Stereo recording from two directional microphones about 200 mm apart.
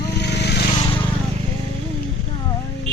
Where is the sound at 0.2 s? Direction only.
55° left (ahead or behind).